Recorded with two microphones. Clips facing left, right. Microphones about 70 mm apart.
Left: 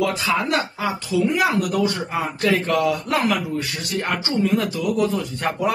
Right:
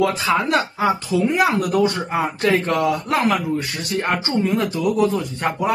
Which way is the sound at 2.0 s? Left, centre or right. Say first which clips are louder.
Right 3 dB; right.